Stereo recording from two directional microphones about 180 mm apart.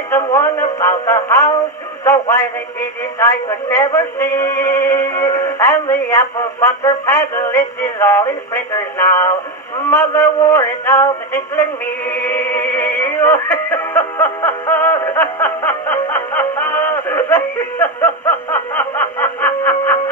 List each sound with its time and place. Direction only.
0.1 s music: 15° left (ahead or behind)
2.0 s a man's voice: 15° left (ahead or behind)
12.1 s music: 10° left (ahead or behind)